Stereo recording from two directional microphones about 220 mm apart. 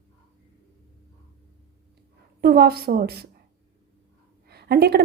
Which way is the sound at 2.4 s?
45° right (ahead or behind).